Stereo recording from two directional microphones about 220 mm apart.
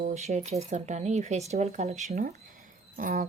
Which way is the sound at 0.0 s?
30° right (ahead or behind).